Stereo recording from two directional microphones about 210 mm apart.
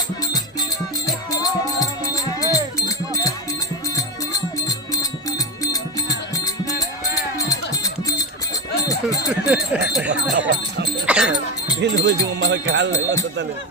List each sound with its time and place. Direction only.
1.0 s music: 15° left (ahead or behind)
9.3 s speech: 5° right (ahead or behind)
10.3 s music: 60° right (ahead or behind)
11.0 s dog: 5° right (ahead or behind)
11.8 s music: 55° right (ahead or behind)